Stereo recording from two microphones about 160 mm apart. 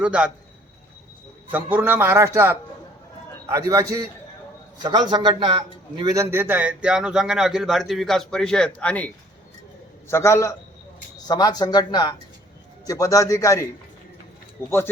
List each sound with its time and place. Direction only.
0.0 s a man's voice: 5° right (ahead or behind)
1.5 s a man's voice: 10° right (ahead or behind); by 6.1 s 30° right (ahead or behind)
6.1 s a man's voice: 15° right (ahead or behind); by 14.7 s 15° left (ahead or behind)